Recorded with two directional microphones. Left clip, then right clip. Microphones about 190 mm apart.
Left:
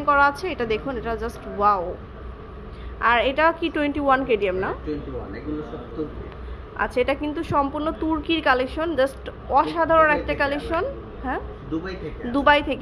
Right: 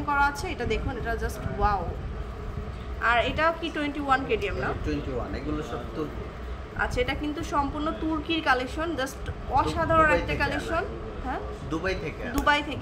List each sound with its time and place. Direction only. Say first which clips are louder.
0.0 s a woman's voice: left 6 dB; 40° left (ahead or behind)
3.0 s a woman's voice: left 5 dB; 40° left (ahead or behind)
7.0 s a woman's voice: left 6 dB; 45° left (ahead or behind)